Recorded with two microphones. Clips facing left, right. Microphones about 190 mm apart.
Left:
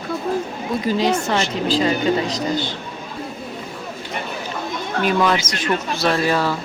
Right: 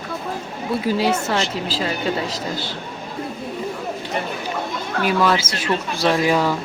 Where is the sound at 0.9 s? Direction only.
5° right (ahead or behind).